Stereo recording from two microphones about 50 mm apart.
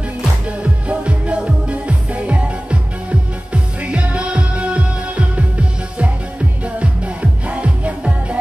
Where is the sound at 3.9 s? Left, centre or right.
Right.